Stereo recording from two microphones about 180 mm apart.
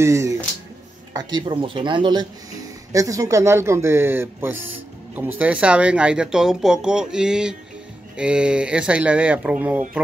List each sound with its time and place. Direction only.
0.0 s speech: 15° right (ahead or behind)